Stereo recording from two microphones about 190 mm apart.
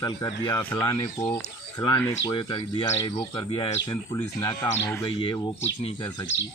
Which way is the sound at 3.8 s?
15° left (ahead or behind).